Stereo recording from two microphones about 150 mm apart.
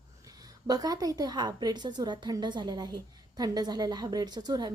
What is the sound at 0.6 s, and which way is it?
A woman's voice, 25° right (ahead or behind).